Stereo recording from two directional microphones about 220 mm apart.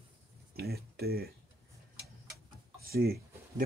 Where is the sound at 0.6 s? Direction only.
45° right (ahead or behind).